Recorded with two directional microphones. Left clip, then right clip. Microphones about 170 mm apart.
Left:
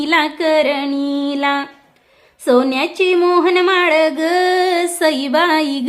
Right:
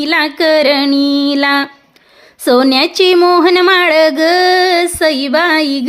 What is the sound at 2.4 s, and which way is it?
Speech, 35° right (ahead or behind).